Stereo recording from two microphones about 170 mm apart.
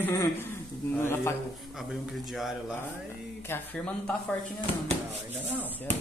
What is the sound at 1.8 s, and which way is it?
Speech, centre (ahead or behind).